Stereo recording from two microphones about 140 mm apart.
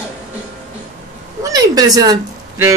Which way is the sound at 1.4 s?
25° right (ahead or behind).